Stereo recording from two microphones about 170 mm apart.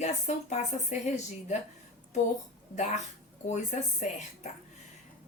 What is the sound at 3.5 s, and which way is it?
Speech, 45° left (ahead or behind).